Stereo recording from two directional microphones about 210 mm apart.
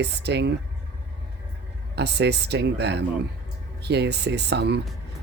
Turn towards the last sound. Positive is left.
turn(degrees=-50)  # may be behind; listen again after turning